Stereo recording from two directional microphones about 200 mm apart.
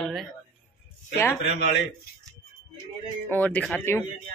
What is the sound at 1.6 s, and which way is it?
Speech, 60° left (ahead or behind).